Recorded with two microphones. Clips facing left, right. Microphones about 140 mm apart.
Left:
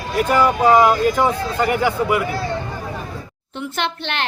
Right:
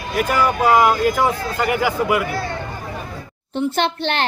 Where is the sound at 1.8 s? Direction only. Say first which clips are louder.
Even; 5° right (ahead or behind).